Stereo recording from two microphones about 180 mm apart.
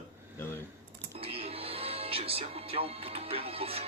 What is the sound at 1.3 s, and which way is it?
Speech, 30° right (ahead or behind).